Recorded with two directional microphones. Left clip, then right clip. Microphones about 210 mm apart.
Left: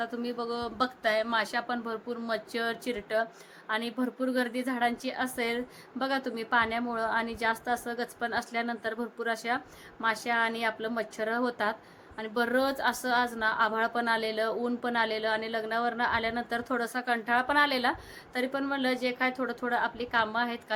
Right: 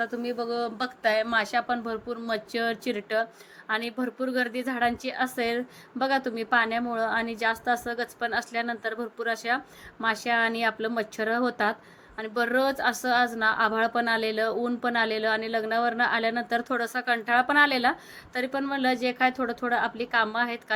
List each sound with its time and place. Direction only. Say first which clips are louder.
0.0 s speech: right 4 dB; 10° right (ahead or behind)